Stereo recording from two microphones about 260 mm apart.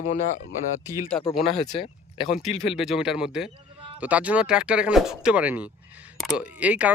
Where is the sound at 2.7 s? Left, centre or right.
Centre.